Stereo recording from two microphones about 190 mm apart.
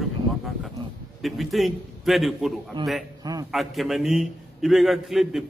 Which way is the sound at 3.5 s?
Centre (ahead or behind).